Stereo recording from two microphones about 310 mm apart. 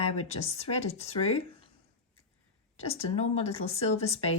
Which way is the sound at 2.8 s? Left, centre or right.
Centre.